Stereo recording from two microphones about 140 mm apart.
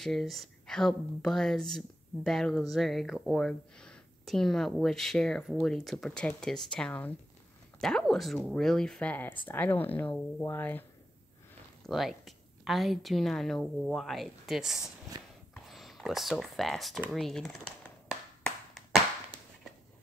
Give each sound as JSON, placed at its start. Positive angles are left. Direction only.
{"t": 0.0, "sound": "speech", "side_deg": 0}
{"t": 11.8, "sound": "speech", "side_deg": 0}
{"t": 15.2, "sound": "a sound", "side_deg": -35}
{"t": 15.5, "sound": "speech", "side_deg": 0}